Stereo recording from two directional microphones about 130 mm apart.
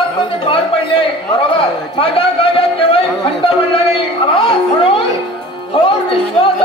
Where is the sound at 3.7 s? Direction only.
45° left (ahead or behind).